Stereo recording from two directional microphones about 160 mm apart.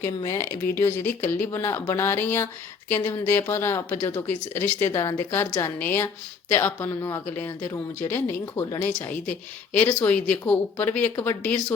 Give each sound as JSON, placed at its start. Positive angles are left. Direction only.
{"t": 0.3, "sound": "a woman's voice", "side_deg": 15}